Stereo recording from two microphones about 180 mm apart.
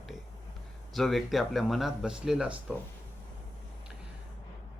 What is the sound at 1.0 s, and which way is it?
Speech, centre (ahead or behind).